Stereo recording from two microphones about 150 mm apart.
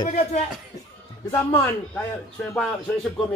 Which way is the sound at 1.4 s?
15° left (ahead or behind).